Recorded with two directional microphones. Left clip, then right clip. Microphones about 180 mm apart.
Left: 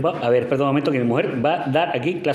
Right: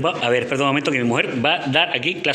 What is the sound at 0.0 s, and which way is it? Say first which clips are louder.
Speech: even; centre (ahead or behind).